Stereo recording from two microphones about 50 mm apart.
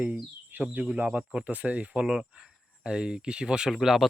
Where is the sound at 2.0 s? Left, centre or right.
Centre.